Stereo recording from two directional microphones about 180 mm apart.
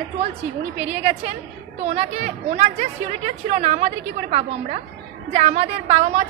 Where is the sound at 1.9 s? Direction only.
40° right (ahead or behind).